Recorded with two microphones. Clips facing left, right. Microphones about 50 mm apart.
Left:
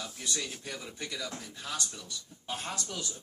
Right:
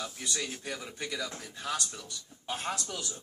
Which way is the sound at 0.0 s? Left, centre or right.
Centre.